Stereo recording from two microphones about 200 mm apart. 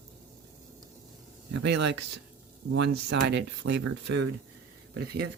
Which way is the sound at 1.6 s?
60° right (ahead or behind).